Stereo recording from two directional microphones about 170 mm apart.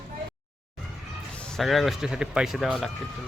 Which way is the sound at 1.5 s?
Centre (ahead or behind).